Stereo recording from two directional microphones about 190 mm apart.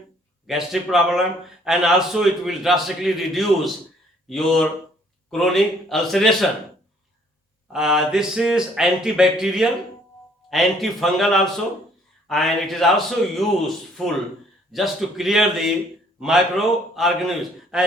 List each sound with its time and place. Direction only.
0.4 s a man's voice: centre (ahead or behind)
7.7 s a man's voice: centre (ahead or behind)
14.7 s a man's voice: centre (ahead or behind)